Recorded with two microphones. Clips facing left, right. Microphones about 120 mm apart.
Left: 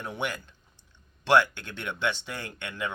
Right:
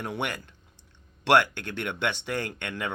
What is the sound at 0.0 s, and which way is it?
Speech, 60° right (ahead or behind).